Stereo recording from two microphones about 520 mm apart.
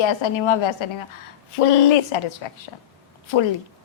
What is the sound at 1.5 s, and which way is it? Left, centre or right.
Speech, left.